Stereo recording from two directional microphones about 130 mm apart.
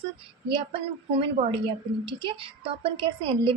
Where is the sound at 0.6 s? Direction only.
45° right (ahead or behind).